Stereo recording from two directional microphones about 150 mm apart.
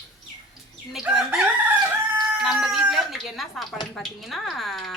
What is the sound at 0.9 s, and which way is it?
Speech, 5° right (ahead or behind).